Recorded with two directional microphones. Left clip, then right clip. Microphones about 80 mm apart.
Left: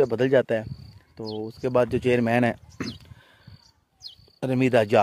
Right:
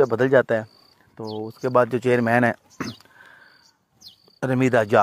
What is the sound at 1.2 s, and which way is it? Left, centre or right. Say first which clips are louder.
Speech: right 2 dB; left.